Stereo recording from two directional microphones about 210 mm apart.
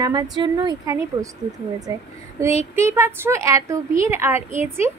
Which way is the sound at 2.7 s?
10° right (ahead or behind).